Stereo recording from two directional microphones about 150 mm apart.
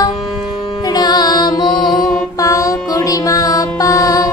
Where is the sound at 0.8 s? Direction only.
25° left (ahead or behind).